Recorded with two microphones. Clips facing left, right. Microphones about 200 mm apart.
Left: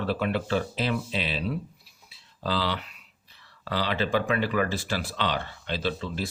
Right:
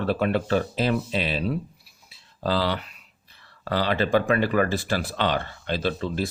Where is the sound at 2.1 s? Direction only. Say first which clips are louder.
Right 4 dB; 50° right (ahead or behind).